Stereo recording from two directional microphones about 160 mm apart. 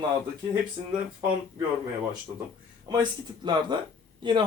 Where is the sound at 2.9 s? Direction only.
25° right (ahead or behind).